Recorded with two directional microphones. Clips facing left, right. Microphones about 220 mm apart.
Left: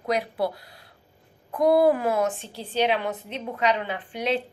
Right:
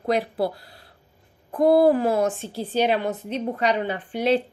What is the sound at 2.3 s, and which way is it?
A woman's voice, 45° right (ahead or behind).